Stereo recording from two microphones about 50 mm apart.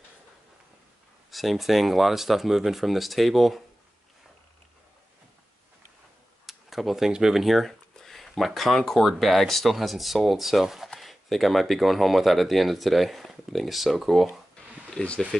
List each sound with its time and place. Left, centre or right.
1.3 s speech: centre
6.4 s a sound: centre
7.1 s speech: centre
15.0 s speech: left